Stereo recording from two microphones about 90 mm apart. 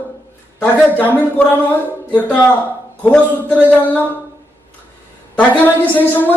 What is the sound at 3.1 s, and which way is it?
Speech, 15° left (ahead or behind).